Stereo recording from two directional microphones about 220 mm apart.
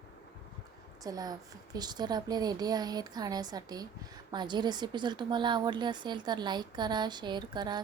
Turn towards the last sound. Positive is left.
turn(degrees=-20)  # may be behind; listen again after turning